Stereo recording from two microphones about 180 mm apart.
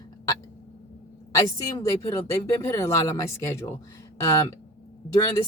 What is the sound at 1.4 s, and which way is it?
Speech, 20° left (ahead or behind).